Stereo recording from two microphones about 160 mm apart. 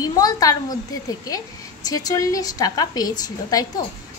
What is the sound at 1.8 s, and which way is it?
A woman's voice, 25° left (ahead or behind).